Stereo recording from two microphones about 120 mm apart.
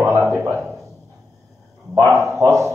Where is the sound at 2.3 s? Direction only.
25° right (ahead or behind).